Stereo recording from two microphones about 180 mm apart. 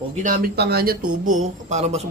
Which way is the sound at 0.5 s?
60° right (ahead or behind).